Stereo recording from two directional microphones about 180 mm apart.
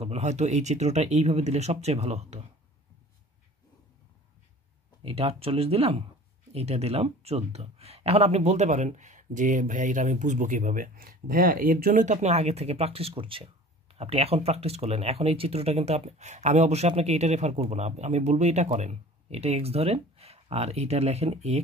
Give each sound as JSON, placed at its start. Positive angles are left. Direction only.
{"t": 0.0, "sound": "speech", "side_deg": -40}
{"t": 5.0, "sound": "speech", "side_deg": -35}